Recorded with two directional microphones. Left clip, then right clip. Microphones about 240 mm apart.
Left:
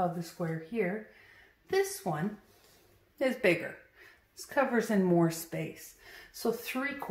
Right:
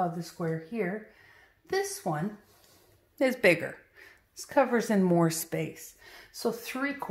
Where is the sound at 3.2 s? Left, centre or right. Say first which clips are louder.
Right 4 dB; right.